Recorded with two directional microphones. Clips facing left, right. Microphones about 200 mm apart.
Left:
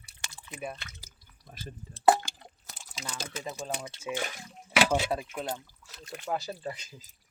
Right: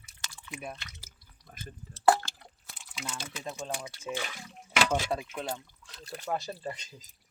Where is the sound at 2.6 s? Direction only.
40° left (ahead or behind).